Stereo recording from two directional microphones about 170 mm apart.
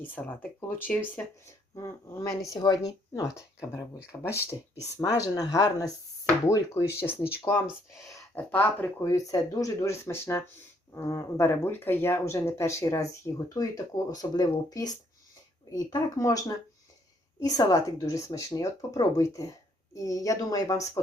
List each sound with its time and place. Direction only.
0.0 s speech: 10° left (ahead or behind)
17.4 s speech: 20° left (ahead or behind)